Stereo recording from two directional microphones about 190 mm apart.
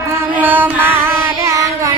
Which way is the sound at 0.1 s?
10° right (ahead or behind).